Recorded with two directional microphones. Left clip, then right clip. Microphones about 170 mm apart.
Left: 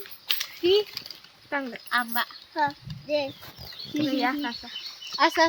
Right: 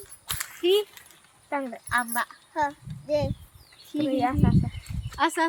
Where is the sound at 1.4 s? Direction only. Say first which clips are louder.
Even; 50° right (ahead or behind).